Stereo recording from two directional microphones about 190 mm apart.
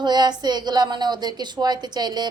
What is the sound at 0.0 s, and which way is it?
A woman's voice, 20° right (ahead or behind).